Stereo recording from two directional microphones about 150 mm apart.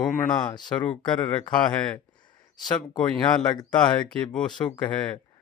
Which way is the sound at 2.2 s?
30° left (ahead or behind).